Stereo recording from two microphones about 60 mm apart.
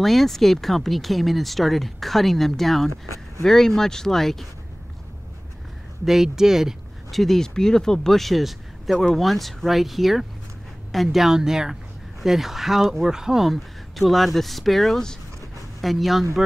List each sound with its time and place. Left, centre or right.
0.0 s speech: centre
6.0 s speech: centre
7.1 s speech: centre